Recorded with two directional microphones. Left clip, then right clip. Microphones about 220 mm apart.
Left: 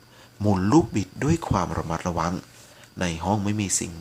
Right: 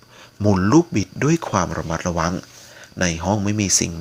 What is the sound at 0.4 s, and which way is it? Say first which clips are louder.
Speech: right 4 dB; 10° right (ahead or behind).